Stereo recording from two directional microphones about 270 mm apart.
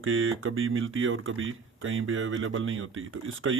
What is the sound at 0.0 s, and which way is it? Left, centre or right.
Speech, right.